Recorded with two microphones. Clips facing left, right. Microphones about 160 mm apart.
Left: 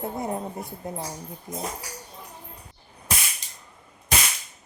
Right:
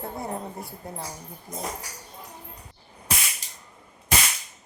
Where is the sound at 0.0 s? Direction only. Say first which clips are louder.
Left 3 dB; 20° left (ahead or behind).